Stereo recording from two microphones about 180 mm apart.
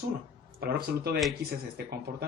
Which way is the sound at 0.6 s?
60° right (ahead or behind).